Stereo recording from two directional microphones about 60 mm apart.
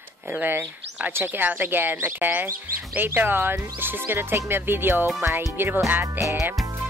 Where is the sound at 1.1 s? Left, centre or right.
Right.